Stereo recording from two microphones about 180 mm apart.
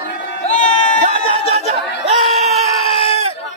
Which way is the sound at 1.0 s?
40° right (ahead or behind).